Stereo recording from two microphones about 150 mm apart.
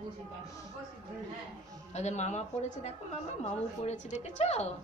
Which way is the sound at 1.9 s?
50° left (ahead or behind).